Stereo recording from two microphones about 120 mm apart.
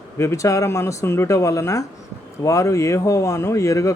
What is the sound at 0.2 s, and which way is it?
Speech, 25° left (ahead or behind).